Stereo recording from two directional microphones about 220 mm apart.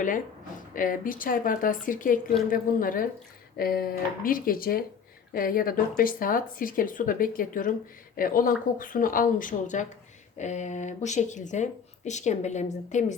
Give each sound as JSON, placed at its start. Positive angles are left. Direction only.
{"t": 0.7, "sound": "speech", "side_deg": 40}